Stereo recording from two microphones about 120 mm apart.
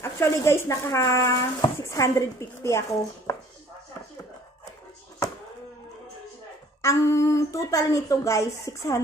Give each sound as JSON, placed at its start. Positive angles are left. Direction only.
{"t": 0.0, "sound": "speech", "side_deg": 25}
{"t": 3.3, "sound": "chopping", "side_deg": 25}
{"t": 6.8, "sound": "speech", "side_deg": 25}